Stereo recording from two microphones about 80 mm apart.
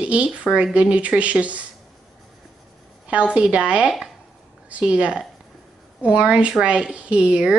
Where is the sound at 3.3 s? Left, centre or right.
Centre.